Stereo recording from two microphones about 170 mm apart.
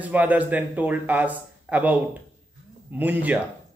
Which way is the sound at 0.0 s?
10° right (ahead or behind).